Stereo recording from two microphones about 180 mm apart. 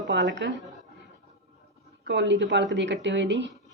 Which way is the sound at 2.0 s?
75° right (ahead or behind).